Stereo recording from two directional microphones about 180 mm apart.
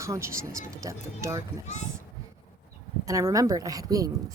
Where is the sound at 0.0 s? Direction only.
15° right (ahead or behind).